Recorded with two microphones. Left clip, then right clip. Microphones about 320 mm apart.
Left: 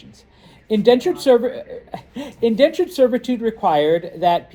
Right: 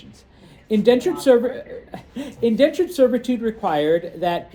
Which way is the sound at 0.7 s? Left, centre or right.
Left.